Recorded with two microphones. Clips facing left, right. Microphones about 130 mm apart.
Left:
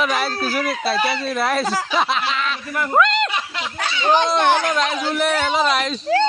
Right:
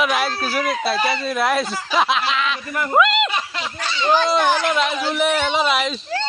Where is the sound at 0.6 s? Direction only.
Centre (ahead or behind).